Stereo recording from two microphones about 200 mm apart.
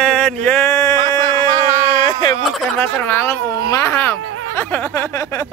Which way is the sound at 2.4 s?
Centre (ahead or behind).